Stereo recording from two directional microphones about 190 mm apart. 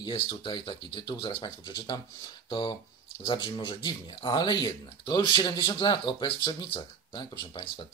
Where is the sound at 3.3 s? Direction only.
25° left (ahead or behind).